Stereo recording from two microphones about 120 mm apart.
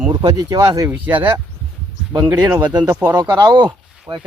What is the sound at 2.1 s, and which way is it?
Speech, 35° right (ahead or behind).